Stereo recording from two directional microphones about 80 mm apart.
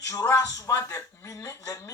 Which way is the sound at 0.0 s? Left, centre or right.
Left.